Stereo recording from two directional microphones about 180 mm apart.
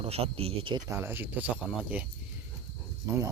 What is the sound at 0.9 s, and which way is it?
Speech, 10° right (ahead or behind).